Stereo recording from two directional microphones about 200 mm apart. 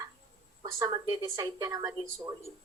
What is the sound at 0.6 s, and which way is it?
A woman's voice, 20° right (ahead or behind).